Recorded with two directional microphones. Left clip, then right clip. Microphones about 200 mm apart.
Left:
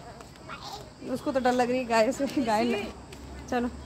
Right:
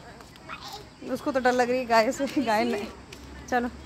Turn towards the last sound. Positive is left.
turn(degrees=-30)  # may be behind; listen again after turning